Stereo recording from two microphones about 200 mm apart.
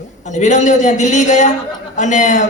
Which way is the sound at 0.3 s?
35° left (ahead or behind).